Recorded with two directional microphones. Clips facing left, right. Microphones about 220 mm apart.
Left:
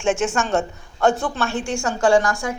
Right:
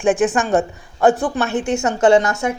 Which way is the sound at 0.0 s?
15° right (ahead or behind).